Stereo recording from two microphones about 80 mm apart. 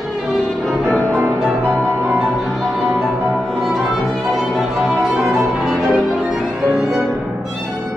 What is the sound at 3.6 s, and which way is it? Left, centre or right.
Violin, centre.